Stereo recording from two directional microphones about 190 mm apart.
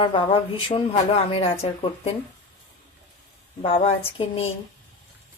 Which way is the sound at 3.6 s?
30° left (ahead or behind).